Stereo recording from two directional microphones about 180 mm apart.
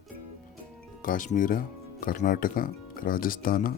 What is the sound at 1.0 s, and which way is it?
Speech, 50° left (ahead or behind).